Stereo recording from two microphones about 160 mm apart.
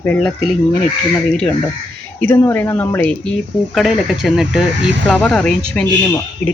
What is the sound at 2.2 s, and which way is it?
Speech, 15° left (ahead or behind).